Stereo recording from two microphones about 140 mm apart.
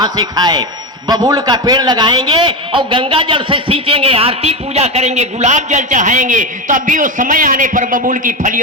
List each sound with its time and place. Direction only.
0.0 s a man's voice: 30° right (ahead or behind); by 8.6 s 70° right (ahead or behind)